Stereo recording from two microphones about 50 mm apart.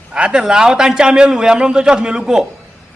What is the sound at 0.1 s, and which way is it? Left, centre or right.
A man's voice, centre.